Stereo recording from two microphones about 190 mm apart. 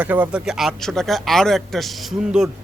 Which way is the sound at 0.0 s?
10° right (ahead or behind).